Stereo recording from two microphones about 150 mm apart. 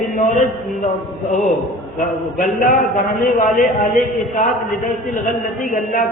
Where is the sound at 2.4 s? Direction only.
60° left (ahead or behind).